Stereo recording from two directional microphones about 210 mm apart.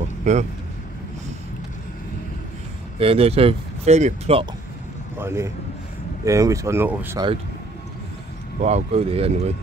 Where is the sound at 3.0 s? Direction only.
25° right (ahead or behind).